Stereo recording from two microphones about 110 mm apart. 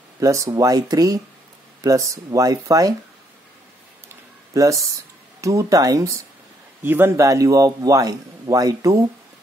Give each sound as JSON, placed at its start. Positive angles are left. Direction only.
{"t": 0.2, "sound": "speech", "side_deg": -30}
{"t": 4.6, "sound": "a man's voice", "side_deg": -30}